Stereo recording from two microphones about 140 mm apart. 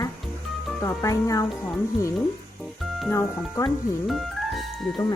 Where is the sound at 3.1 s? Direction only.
20° left (ahead or behind).